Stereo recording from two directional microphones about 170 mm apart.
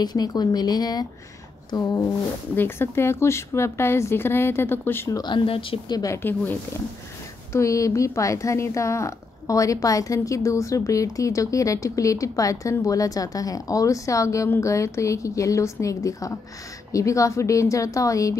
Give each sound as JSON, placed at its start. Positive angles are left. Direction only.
{"t": 0.0, "sound": "a woman's voice", "side_deg": 25}
{"t": 5.2, "sound": "a woman's voice", "side_deg": 30}
{"t": 7.5, "sound": "a woman's voice", "side_deg": 20}